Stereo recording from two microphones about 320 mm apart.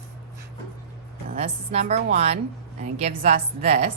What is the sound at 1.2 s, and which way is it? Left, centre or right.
A woman's voice, centre.